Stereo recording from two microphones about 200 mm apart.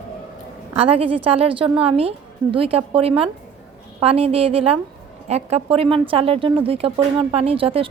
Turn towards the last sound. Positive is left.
turn(degrees=-25)  # may be behind; listen again after turning